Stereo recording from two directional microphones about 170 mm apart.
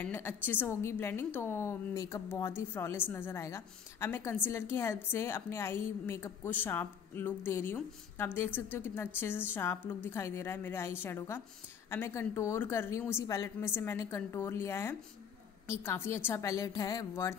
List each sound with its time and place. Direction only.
0.0 s a woman's voice: 10° left (ahead or behind)